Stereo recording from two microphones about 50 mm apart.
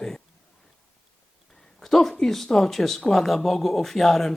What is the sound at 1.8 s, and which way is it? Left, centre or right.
Speech, centre.